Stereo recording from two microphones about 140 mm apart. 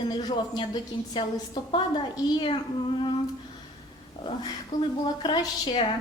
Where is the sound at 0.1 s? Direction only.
30° left (ahead or behind).